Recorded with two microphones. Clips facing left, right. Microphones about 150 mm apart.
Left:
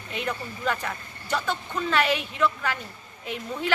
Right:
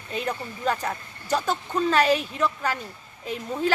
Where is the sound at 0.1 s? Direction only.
35° right (ahead or behind).